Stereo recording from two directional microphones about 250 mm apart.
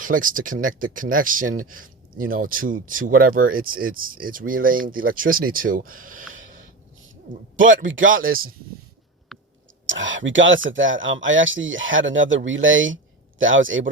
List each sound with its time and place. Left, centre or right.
0.0 s speech: right
7.9 s speech: right
9.3 s a sound: centre
9.8 s speech: right